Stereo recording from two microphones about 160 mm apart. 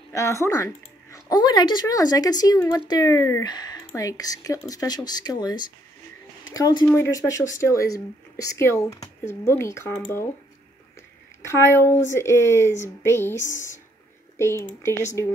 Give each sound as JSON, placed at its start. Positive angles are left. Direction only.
{"t": 0.1, "sound": "speech", "side_deg": 20}
{"t": 11.4, "sound": "speech", "side_deg": 15}